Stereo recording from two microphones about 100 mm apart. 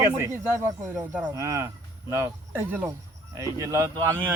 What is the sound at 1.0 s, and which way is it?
Speech, 15° right (ahead or behind).